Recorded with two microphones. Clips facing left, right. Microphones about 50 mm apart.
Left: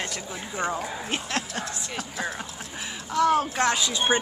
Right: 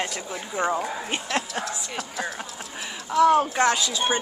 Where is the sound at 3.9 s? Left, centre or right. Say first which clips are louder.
Left 1 dB; left.